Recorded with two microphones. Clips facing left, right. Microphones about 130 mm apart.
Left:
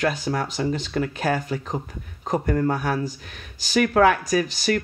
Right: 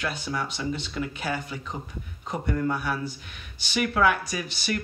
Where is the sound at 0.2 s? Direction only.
45° left (ahead or behind).